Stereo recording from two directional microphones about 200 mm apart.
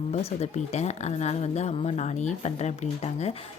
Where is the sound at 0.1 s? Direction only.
35° left (ahead or behind).